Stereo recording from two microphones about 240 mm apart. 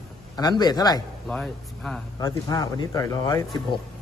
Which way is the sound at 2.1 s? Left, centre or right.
Centre.